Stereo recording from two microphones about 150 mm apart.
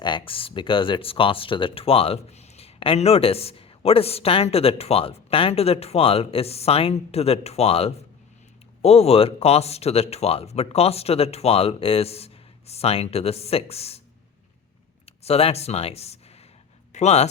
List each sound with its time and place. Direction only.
0.0 s speech: 35° left (ahead or behind)
15.0 s speech: 40° left (ahead or behind)